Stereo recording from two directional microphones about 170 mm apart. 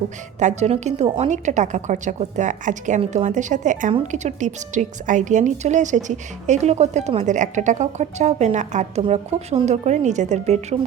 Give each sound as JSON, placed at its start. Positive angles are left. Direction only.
{"t": 0.3, "sound": "speech", "side_deg": -45}